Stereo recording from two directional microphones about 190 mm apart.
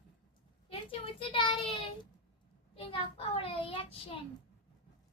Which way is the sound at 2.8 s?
30° left (ahead or behind).